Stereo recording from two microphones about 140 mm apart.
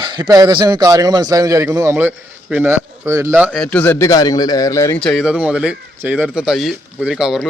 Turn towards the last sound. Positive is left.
turn(degrees=-5)  # may be behind; listen again after turning